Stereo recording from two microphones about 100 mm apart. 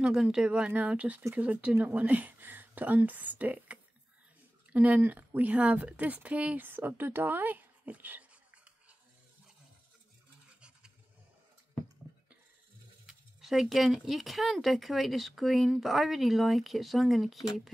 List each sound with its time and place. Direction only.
0.0 s a woman's voice: 5° right (ahead or behind)
13.0 s speech: 5° right (ahead or behind)